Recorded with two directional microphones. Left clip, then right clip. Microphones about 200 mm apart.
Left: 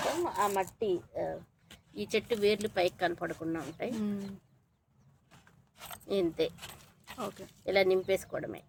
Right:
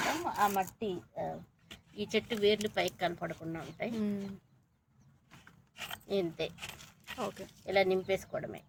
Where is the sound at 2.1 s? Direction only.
55° left (ahead or behind).